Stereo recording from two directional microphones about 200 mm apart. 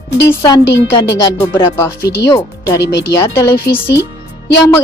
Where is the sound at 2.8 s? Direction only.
60° left (ahead or behind).